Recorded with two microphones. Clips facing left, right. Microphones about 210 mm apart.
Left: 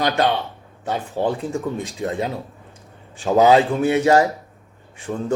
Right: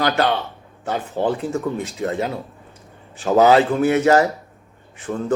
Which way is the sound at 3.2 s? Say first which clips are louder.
Even; 15° left (ahead or behind).